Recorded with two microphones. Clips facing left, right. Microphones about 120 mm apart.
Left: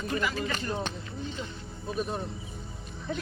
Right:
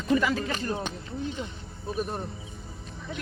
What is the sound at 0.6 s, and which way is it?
Speech, 10° right (ahead or behind).